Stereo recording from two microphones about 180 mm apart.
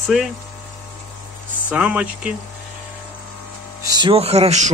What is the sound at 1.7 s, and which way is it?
Speech, 10° right (ahead or behind).